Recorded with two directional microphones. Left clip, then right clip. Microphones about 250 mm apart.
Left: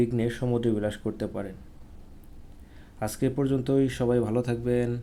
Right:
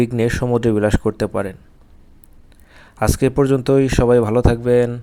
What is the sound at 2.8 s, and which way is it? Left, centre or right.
Speech, right.